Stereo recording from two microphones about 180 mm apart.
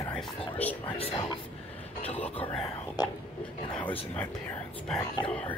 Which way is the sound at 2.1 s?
10° left (ahead or behind).